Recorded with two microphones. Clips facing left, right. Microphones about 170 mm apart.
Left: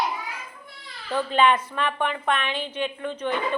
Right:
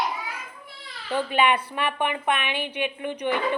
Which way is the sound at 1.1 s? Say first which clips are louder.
Left 1 dB; 10° right (ahead or behind).